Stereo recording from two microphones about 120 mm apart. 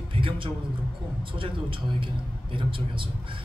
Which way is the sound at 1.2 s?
45° right (ahead or behind).